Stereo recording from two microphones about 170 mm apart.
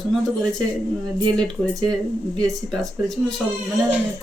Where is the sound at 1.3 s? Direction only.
5° left (ahead or behind).